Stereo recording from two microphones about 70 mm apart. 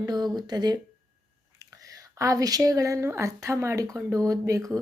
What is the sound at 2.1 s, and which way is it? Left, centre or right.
Speech, right.